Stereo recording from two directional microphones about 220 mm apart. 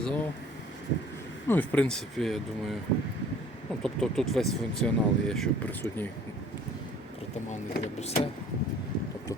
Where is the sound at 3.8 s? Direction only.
Centre (ahead or behind).